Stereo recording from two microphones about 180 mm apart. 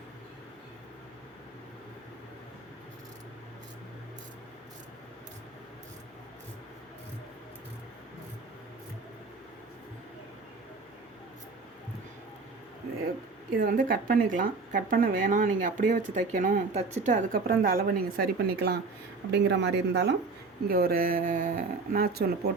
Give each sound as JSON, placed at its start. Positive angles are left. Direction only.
{"t": 13.6, "sound": "speech", "side_deg": -50}
{"t": 20.7, "sound": "speech", "side_deg": -60}